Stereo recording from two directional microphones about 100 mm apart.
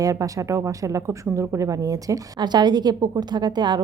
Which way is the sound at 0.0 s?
35° right (ahead or behind).